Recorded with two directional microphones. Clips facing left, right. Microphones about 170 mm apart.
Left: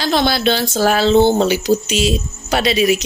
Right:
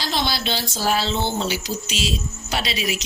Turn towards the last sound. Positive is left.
turn(degrees=55)  # may be behind; listen again after turning